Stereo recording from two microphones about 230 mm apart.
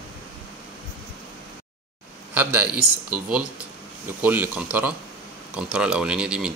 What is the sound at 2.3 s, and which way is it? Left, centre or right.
Speech, centre.